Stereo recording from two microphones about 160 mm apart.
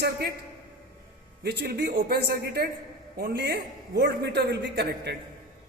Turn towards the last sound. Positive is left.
turn(degrees=-90)